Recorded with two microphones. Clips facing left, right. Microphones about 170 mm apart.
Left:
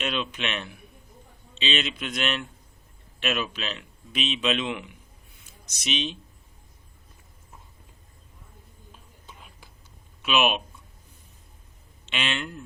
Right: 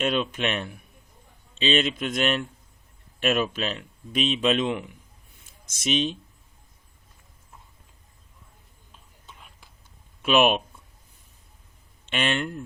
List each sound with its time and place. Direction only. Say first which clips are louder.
0.0 s speech: right 5 dB; 45° right (ahead or behind)
10.2 s speech: right 4 dB; 50° right (ahead or behind)
12.0 s speech: right 5 dB; 50° right (ahead or behind)